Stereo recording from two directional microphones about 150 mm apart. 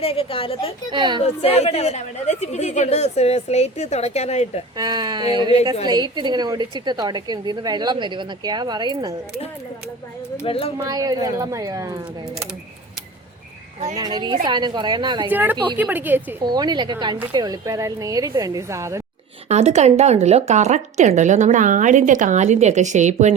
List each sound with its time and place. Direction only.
0.0 s a woman's voice: 40° left (ahead or behind)
0.9 s speech: 30° right (ahead or behind)
1.2 s a woman's voice: 45° left (ahead or behind)
4.8 s a woman's voice: 25° right (ahead or behind)
10.4 s a woman's voice: 40° left (ahead or behind)
10.8 s a woman's voice: 25° right (ahead or behind)
13.9 s a woman's voice: 25° right (ahead or behind)
15.3 s speech: 10° right (ahead or behind)
16.4 s a woman's voice: 30° right (ahead or behind)
19.5 s a woman's voice: 45° right (ahead or behind)